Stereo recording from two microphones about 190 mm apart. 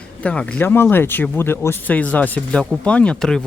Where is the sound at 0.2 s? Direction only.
5° left (ahead or behind).